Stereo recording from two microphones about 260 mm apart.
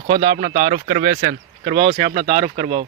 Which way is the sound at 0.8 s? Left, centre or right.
Right.